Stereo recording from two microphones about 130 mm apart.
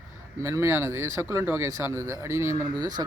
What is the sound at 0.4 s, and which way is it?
Speech, 25° right (ahead or behind).